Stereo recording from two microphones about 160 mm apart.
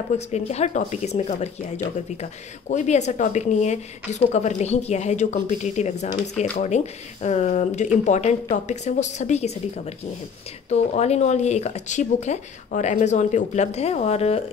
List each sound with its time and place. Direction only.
0.3 s speech: 45° left (ahead or behind)
2.7 s speech: 45° left (ahead or behind)